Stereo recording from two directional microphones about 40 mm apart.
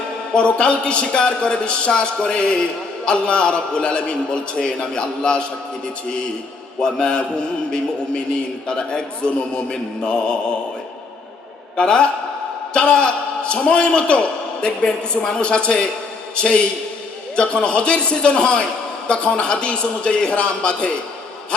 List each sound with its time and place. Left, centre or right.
0.3 s a man's voice: left
6.8 s a man's voice: left
11.8 s a man's voice: left